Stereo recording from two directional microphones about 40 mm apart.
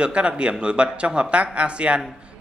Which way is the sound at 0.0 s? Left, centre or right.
Right.